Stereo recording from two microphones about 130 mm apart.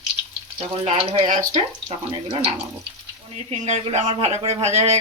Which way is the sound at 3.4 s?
60° right (ahead or behind).